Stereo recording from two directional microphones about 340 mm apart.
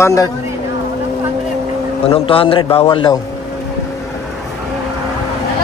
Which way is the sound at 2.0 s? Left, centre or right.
Centre.